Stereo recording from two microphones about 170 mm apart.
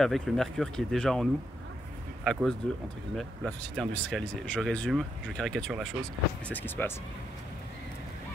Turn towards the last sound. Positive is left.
turn(degrees=10)  # may be behind; listen again after turning